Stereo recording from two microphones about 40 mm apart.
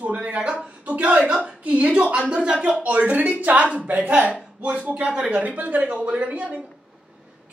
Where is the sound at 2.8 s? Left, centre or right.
Right.